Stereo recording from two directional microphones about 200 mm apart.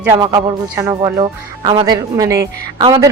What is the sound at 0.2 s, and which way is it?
A man's voice, 20° right (ahead or behind).